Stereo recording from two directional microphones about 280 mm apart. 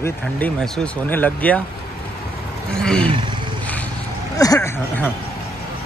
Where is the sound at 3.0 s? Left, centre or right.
Centre.